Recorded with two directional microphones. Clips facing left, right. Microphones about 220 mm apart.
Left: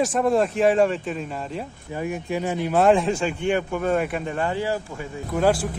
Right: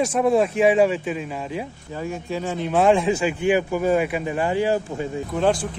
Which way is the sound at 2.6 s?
Centre (ahead or behind).